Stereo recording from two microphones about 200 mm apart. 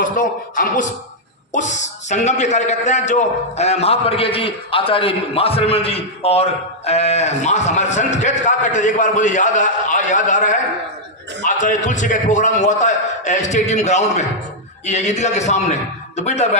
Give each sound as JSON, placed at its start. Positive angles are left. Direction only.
{"t": 0.0, "sound": "a man's voice", "side_deg": 40}